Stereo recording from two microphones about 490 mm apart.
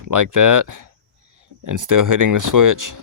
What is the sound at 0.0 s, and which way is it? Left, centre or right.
Speech, right.